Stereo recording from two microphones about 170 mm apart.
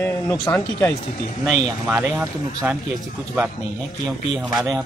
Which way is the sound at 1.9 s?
15° right (ahead or behind).